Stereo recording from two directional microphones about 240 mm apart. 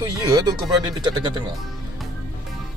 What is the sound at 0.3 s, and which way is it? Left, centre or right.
Speech, centre.